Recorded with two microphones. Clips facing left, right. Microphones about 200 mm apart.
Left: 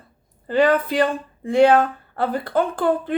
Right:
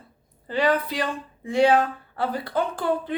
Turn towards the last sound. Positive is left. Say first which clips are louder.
# left 5 dB
turn(degrees=50)  # may be behind; listen again after turning